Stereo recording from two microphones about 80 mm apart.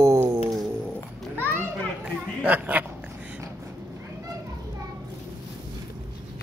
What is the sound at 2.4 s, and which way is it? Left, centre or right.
Speech, right.